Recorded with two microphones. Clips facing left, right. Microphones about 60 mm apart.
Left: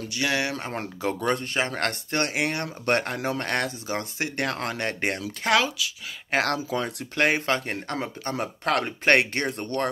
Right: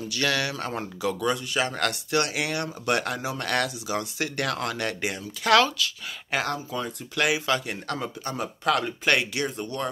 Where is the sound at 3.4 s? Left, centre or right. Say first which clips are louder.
Right 1 dB; left.